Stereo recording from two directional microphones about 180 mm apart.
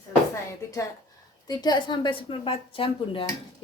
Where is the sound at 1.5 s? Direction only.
25° left (ahead or behind).